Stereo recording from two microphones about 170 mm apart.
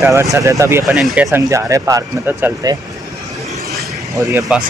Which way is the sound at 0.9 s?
5° right (ahead or behind).